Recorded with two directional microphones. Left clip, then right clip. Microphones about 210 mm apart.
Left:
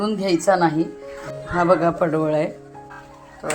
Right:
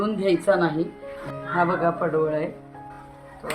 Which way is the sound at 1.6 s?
55° left (ahead or behind).